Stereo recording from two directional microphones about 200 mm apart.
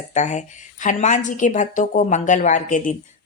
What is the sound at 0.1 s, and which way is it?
Speech, 35° left (ahead or behind).